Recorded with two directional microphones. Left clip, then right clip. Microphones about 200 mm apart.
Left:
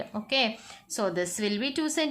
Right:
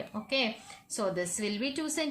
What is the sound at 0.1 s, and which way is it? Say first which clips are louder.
A woman's voice: left 4 dB; 35° left (ahead or behind).